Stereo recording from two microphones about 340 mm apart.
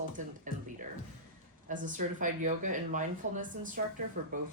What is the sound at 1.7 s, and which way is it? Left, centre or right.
Speech, right.